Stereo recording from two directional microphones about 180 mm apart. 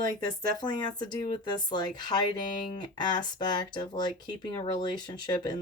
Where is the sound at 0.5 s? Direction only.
25° left (ahead or behind).